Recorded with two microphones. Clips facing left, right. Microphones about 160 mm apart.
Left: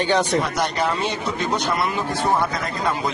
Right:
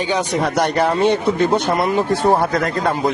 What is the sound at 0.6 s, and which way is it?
Speech, 55° right (ahead or behind).